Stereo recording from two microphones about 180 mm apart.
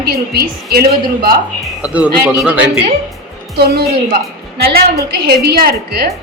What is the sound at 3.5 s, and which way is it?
A woman's voice, 60° right (ahead or behind).